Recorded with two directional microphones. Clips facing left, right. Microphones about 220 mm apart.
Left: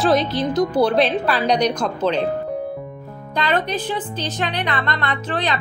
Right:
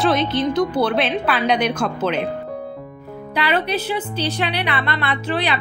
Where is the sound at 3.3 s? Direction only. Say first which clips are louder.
Right 1 dB; 10° right (ahead or behind).